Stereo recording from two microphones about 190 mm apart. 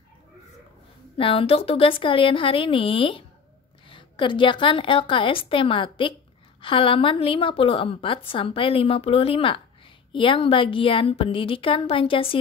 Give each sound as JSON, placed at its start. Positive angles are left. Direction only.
{"t": 1.1, "sound": "a woman's voice", "side_deg": 30}